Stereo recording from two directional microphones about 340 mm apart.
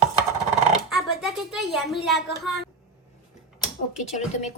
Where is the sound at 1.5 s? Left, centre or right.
Centre.